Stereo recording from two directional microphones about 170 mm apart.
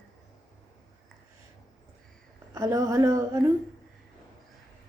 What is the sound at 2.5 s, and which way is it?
A woman's voice, 20° right (ahead or behind).